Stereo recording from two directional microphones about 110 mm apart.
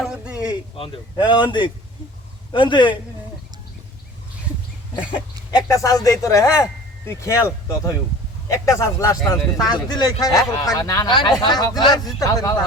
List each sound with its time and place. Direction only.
0.0 s a sound: 10° right (ahead or behind)
1.1 s speech: 45° left (ahead or behind)
5.6 s speech: 30° left (ahead or behind)
11.1 s speech: 50° left (ahead or behind)
11.3 s speech: 40° left (ahead or behind)